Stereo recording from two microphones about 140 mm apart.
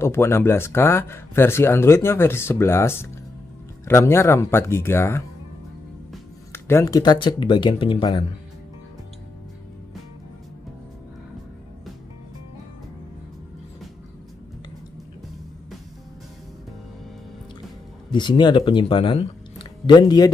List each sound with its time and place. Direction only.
0.0 s speech: 20° left (ahead or behind)
6.5 s speech: 20° left (ahead or behind)
18.1 s speech: 35° left (ahead or behind)